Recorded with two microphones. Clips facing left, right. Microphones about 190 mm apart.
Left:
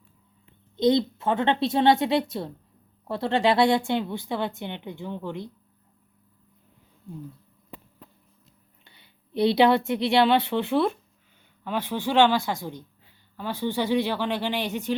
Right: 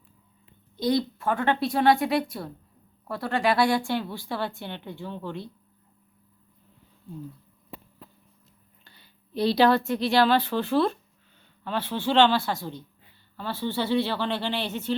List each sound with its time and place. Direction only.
0.8 s a woman's voice: 20° left (ahead or behind)
9.3 s a woman's voice: 20° left (ahead or behind)